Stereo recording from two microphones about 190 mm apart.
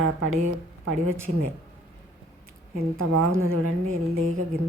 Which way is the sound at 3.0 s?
90° right.